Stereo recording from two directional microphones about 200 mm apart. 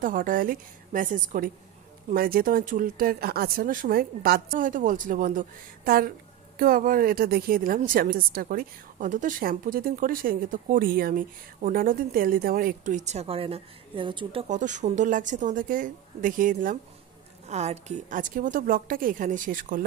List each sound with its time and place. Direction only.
0.0 s a woman's voice: 45° right (ahead or behind); by 14.4 s 25° right (ahead or behind)
14.5 s a woman's voice: 35° right (ahead or behind)